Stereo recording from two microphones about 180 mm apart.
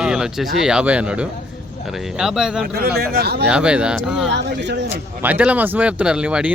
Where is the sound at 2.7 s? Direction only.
60° right (ahead or behind).